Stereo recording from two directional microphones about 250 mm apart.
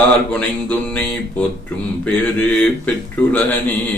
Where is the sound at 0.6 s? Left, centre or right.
Centre.